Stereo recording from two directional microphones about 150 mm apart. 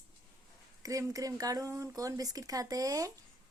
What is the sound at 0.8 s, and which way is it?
Speech, 20° right (ahead or behind).